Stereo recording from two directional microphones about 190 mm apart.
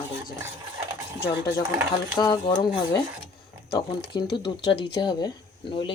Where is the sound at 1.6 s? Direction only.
10° right (ahead or behind).